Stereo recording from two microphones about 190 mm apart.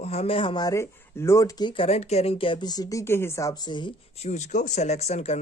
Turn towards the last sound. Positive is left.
turn(degrees=35)  # may be behind; listen again after turning